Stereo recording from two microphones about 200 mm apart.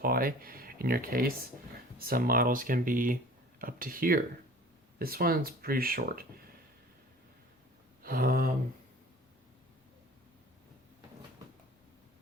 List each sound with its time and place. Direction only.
0.0 s speech: 45° right (ahead or behind)
8.0 s speech: 50° right (ahead or behind)